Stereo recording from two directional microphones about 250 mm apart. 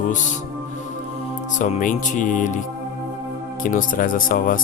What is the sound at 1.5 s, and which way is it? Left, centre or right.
Speech, left.